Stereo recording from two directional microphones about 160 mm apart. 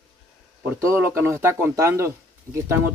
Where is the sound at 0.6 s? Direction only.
15° right (ahead or behind).